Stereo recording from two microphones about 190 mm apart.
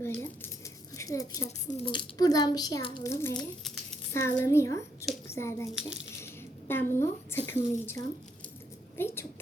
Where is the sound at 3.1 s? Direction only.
15° left (ahead or behind).